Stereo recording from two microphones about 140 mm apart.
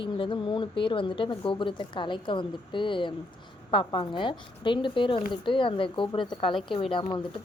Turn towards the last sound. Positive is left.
turn(degrees=40)  # may be behind; listen again after turning